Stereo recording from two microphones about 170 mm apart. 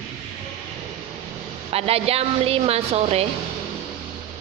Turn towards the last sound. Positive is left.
turn(degrees=-35)  # may be behind; listen again after turning